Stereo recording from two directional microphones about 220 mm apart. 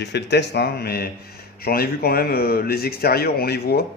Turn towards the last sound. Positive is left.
turn(degrees=45)  # may be behind; listen again after turning